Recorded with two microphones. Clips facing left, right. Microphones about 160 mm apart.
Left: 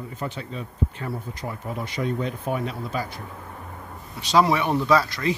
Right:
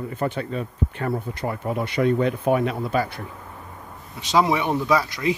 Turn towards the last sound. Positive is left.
turn(degrees=-15)  # may be behind; listen again after turning